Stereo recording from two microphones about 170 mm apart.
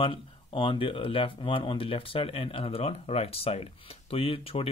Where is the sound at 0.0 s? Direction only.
30° left (ahead or behind).